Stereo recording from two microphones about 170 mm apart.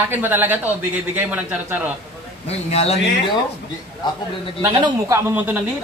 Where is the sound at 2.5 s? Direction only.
40° left (ahead or behind).